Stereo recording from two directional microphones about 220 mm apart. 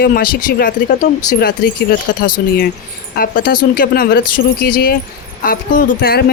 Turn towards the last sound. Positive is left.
turn(degrees=40)  # may be behind; listen again after turning